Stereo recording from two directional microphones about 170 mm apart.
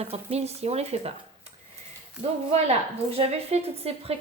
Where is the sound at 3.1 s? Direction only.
35° right (ahead or behind).